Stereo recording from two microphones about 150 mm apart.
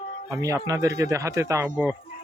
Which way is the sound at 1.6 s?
10° right (ahead or behind).